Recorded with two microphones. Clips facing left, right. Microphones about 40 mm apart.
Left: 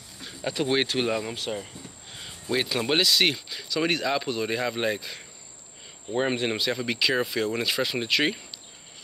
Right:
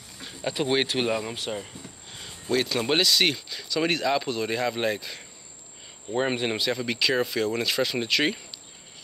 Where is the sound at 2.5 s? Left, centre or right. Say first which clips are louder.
Right 1 dB; centre.